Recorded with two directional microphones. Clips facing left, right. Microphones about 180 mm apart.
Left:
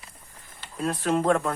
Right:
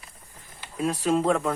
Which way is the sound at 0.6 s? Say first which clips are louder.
Right 2 dB; 10° right (ahead or behind).